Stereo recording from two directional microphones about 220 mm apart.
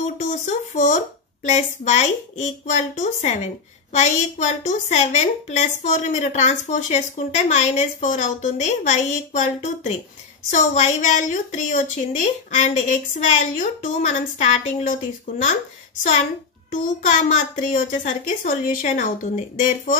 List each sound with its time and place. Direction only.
0.2 s a woman's voice: 35° left (ahead or behind)